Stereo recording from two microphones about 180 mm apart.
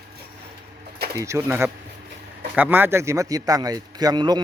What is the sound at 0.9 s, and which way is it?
Bird, 60° right (ahead or behind).